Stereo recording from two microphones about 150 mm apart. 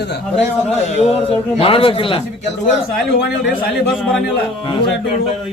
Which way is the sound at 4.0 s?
5° left (ahead or behind).